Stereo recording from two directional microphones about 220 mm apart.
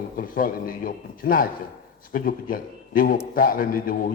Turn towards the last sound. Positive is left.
turn(degrees=40)  # may be behind; listen again after turning